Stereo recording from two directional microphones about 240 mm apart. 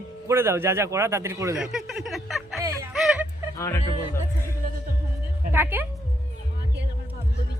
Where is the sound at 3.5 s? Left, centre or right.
Centre.